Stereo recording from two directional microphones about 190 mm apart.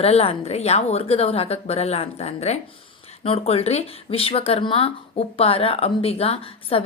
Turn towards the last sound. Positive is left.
turn(degrees=30)  # may be behind; listen again after turning